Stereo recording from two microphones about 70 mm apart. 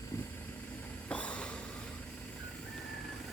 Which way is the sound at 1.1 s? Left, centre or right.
Centre.